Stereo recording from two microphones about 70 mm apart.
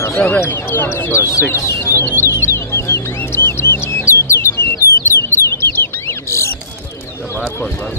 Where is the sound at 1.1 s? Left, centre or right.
Left.